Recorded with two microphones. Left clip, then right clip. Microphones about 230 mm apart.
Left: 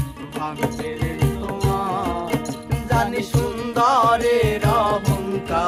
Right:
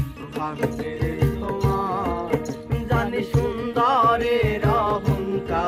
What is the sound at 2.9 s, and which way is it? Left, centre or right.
Music, left.